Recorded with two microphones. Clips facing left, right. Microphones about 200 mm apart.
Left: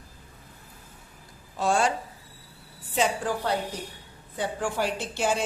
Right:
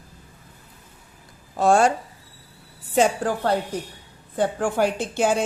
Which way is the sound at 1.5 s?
50° right (ahead or behind).